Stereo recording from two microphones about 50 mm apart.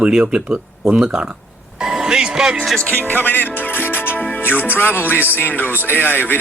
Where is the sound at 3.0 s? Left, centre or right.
Left.